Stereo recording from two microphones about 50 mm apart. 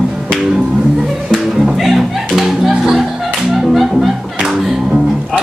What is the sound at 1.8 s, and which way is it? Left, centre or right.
Music, centre.